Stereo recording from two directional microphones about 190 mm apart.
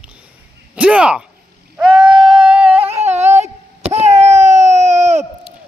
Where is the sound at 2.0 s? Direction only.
25° right (ahead or behind).